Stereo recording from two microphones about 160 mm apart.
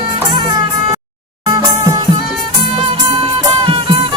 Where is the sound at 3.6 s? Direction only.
35° right (ahead or behind).